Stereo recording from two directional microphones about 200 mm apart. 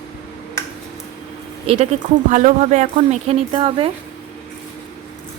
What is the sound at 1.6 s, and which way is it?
Speech, 30° right (ahead or behind).